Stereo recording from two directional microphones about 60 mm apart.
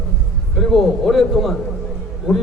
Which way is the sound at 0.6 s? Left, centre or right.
Centre.